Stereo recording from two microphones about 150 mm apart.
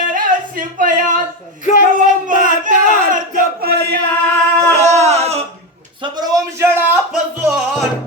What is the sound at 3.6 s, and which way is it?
Chant, 90° right.